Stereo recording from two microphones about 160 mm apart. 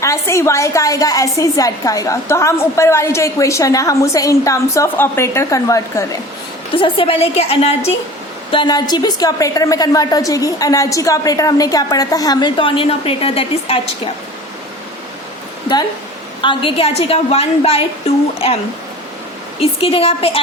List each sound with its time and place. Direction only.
0.0 s a woman's voice: 20° left (ahead or behind)
6.8 s a woman's voice: 35° left (ahead or behind)
8.4 s a woman's voice: 30° left (ahead or behind)
16.4 s a woman's voice: 30° left (ahead or behind)
19.5 s a woman's voice: 35° left (ahead or behind)